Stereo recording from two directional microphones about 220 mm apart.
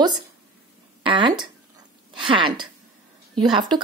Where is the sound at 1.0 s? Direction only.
20° right (ahead or behind).